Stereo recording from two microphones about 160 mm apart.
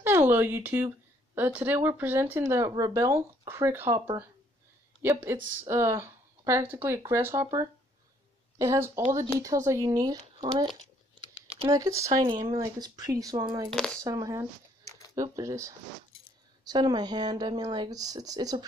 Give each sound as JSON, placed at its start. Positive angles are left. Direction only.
{"t": 0.0, "sound": "speech", "side_deg": -15}
{"t": 5.0, "sound": "speech", "side_deg": -15}
{"t": 11.7, "sound": "speech", "side_deg": -20}
{"t": 13.7, "sound": "speech", "side_deg": 5}
{"t": 14.0, "sound": "speech", "side_deg": -20}